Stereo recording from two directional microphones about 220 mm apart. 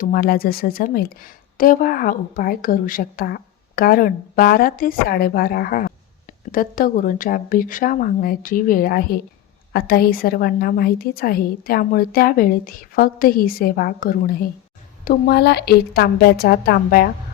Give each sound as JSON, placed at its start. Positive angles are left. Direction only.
{"t": 0.0, "sound": "a woman's voice", "side_deg": 40}